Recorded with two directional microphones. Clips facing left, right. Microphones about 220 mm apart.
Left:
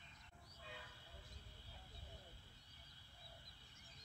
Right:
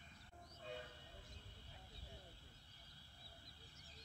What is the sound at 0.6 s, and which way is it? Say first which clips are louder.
Vehicle: right 7 dB; 45° right (ahead or behind).